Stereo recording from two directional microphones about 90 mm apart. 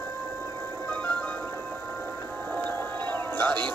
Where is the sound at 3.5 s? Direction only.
55° right (ahead or behind).